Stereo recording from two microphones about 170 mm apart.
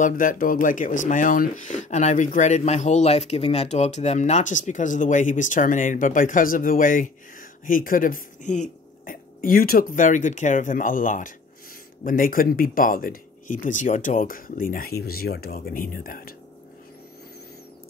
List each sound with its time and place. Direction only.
0.0 s speech: 50° left (ahead or behind)